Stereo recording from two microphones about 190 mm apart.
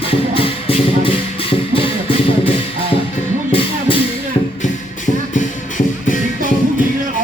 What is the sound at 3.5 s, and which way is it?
Music, 30° left (ahead or behind).